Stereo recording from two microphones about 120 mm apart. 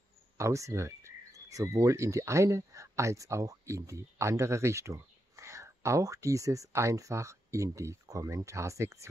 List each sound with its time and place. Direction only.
0.4 s speech: 25° right (ahead or behind)